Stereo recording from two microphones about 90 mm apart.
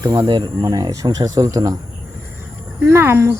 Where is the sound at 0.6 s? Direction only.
45° right (ahead or behind).